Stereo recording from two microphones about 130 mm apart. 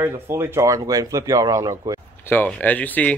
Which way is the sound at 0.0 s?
20° right (ahead or behind).